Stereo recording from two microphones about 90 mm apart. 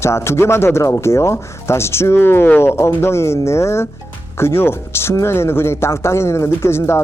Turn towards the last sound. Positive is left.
turn(degrees=30)  # may be behind; listen again after turning